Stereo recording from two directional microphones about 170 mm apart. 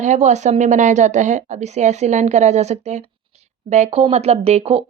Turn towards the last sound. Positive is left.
turn(degrees=-35)  # may be behind; listen again after turning